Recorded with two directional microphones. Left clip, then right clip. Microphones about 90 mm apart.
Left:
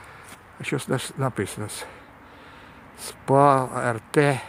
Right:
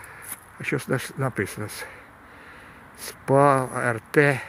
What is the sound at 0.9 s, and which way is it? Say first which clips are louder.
Speech: even; centre (ahead or behind).